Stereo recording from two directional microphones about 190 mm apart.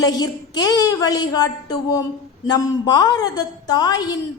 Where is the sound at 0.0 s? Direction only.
20° left (ahead or behind).